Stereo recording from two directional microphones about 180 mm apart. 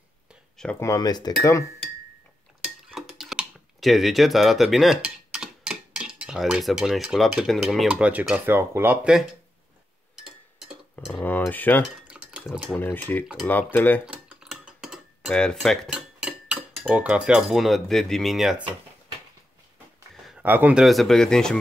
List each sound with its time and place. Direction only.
0.3 s a sound: 5° left (ahead or behind)
0.7 s speech: 20° left (ahead or behind)
2.6 s speech: 5° right (ahead or behind)
10.1 s a sound: centre (ahead or behind)
11.2 s cutlery: 10° left (ahead or behind)
11.8 s stir: 5° right (ahead or behind)
12.8 s cutlery: 10° left (ahead or behind)
14.0 s cutlery: 5° right (ahead or behind)
20.2 s speech: 5° right (ahead or behind)